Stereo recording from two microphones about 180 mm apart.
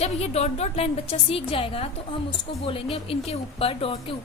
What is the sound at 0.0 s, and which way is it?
A woman's voice, 35° left (ahead or behind).